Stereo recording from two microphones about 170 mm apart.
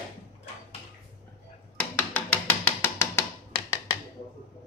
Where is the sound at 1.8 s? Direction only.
5° left (ahead or behind).